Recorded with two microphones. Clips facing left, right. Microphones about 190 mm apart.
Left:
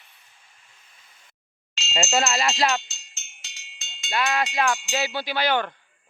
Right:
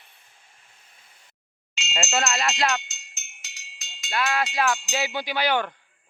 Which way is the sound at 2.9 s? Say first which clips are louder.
Right 1 dB; 30° left (ahead or behind).